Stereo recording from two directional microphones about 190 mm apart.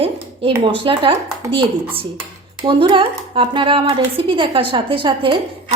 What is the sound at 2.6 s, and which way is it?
A woman's voice, 25° right (ahead or behind).